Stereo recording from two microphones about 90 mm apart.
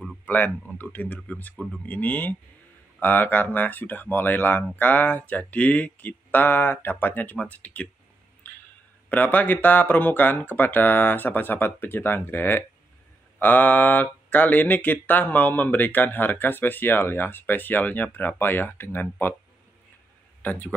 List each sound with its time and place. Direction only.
0.2 s speech: 20° left (ahead or behind)
9.1 s speech: 20° left (ahead or behind)
20.4 s speech: 20° left (ahead or behind)